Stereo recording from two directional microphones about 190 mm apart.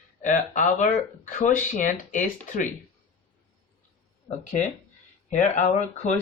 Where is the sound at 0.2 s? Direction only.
40° left (ahead or behind).